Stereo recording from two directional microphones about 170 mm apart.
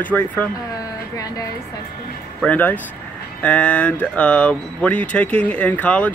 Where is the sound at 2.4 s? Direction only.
10° left (ahead or behind).